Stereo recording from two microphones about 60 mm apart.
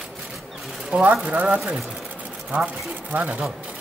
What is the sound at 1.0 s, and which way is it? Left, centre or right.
Speech, right.